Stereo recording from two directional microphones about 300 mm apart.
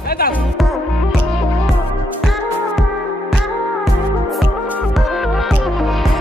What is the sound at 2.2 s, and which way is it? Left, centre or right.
Music, centre.